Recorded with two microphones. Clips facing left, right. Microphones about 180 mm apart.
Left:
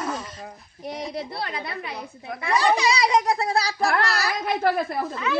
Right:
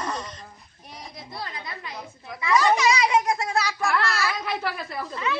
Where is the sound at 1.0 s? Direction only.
70° left (ahead or behind).